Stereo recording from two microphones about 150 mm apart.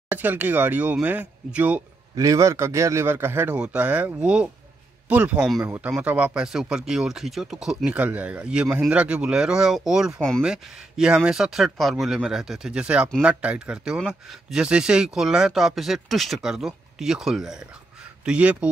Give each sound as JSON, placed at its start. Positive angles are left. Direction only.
{"t": 0.1, "sound": "speech", "side_deg": -15}
{"t": 2.1, "sound": "speech", "side_deg": -20}